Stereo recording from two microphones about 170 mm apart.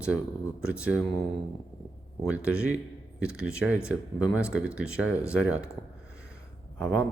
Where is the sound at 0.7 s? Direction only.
5° right (ahead or behind).